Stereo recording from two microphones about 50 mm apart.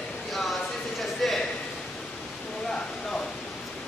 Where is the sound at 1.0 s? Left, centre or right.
Centre.